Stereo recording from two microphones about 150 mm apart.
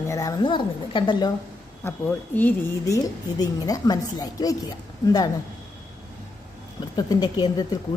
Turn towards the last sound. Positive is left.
turn(degrees=30)  # may be behind; listen again after turning